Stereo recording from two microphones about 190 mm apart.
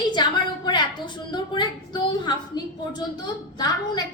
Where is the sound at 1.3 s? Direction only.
25° left (ahead or behind).